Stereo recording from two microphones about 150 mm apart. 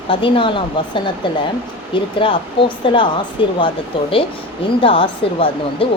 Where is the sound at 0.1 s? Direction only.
35° left (ahead or behind).